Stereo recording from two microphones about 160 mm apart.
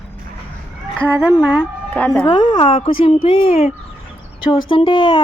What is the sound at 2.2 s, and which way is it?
Speech, 30° left (ahead or behind).